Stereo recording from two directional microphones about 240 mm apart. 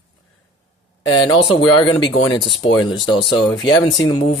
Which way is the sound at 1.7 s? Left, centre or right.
Left.